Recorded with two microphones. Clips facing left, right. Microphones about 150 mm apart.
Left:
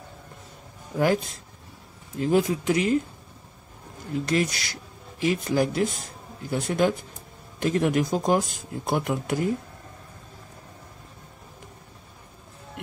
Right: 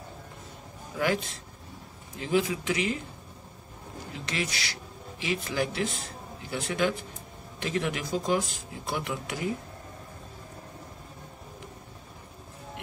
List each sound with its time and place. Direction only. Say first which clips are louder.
0.9 s speech: left 5 dB; 40° left (ahead or behind)
4.1 s speech: left 9 dB; 45° left (ahead or behind)